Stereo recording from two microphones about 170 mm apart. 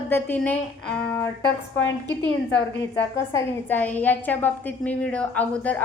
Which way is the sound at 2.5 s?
90° left.